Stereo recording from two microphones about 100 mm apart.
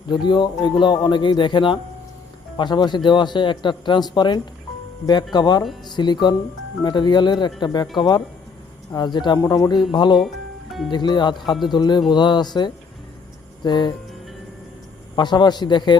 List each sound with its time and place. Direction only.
0.1 s speech: 50° left (ahead or behind)
10.2 s music: centre (ahead or behind)
10.9 s speech: 50° left (ahead or behind)
15.1 s speech: 50° left (ahead or behind)